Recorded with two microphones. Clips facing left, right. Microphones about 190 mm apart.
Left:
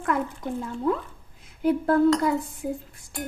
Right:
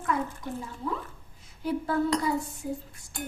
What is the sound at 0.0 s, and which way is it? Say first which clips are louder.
Speech: left 3 dB; 60° left (ahead or behind).